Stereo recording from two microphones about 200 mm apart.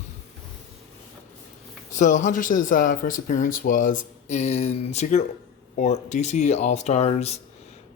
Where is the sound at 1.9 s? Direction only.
40° left (ahead or behind).